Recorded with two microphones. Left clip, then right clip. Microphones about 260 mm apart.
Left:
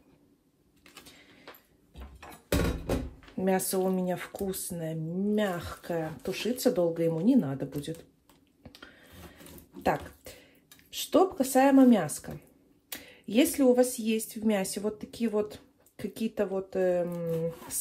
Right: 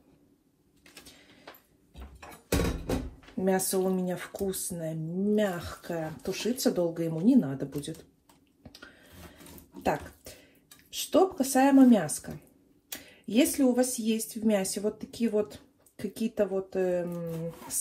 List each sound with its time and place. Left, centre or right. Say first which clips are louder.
3.3 s speech: right 1 dB; left
11.0 s speech: even; left